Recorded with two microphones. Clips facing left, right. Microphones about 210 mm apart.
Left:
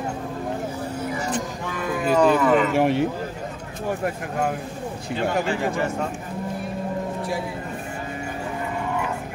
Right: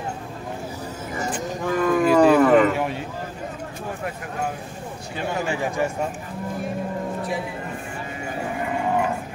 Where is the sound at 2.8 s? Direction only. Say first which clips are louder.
Left 7 dB; 70° left (ahead or behind).